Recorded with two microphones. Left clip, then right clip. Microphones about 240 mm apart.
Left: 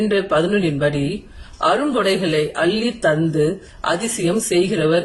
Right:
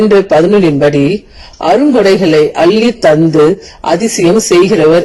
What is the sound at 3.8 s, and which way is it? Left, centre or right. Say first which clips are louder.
Speech: right 8 dB; right.